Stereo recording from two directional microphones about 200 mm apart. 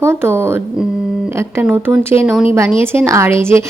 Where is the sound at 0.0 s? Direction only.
15° right (ahead or behind).